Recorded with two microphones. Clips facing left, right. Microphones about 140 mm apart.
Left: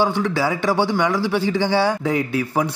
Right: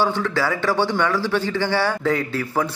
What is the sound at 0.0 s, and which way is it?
A man's voice, 15° left (ahead or behind).